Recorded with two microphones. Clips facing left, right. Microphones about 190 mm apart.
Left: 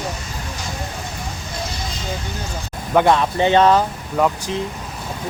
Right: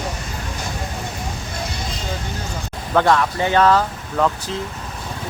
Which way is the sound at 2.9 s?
20° left (ahead or behind).